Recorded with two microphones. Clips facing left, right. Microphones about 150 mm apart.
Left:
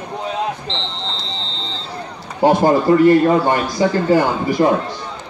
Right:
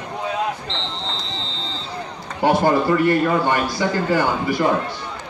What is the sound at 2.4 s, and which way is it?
A man's voice, 30° left (ahead or behind).